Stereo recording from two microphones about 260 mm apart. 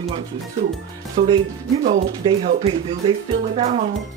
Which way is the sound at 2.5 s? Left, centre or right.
Right.